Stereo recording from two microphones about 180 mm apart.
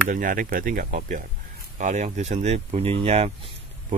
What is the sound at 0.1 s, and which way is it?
Speech, 50° right (ahead or behind).